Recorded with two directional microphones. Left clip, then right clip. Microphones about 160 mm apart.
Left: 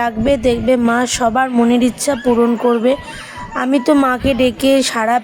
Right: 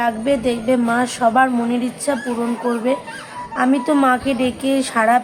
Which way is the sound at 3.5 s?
50° left (ahead or behind).